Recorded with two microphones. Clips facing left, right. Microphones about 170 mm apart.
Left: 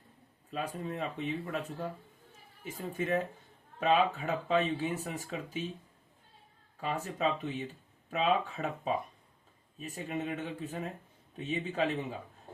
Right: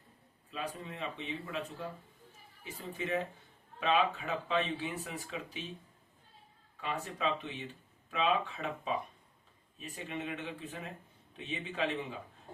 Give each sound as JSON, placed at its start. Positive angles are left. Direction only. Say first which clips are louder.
{"t": 0.5, "sound": "speech", "louder": "left 4 dB", "side_deg": 45}
{"t": 6.7, "sound": "speech", "louder": "left 3 dB", "side_deg": 40}